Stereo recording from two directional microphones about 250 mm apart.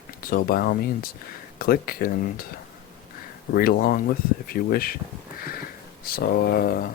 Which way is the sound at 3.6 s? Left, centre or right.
Left.